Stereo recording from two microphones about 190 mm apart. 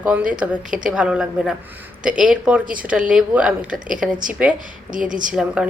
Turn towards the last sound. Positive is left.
turn(degrees=-5)  # may be behind; listen again after turning